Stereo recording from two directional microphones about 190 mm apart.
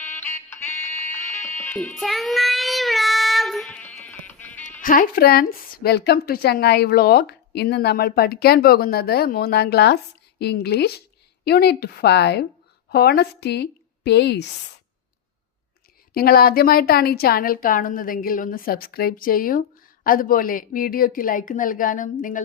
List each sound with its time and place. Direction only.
0.0 s music: 10° left (ahead or behind)
4.8 s a woman's voice: 45° left (ahead or behind); by 14.5 s 60° left (ahead or behind)
16.1 s speech: 55° left (ahead or behind)